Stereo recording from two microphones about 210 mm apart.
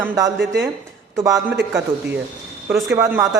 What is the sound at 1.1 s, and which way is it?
Speech, 15° right (ahead or behind).